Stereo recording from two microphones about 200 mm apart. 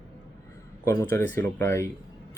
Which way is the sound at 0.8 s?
10° left (ahead or behind).